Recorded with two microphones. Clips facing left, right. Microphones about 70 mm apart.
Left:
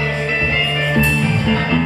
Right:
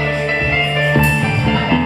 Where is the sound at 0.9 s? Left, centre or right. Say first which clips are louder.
Right 1 dB; right.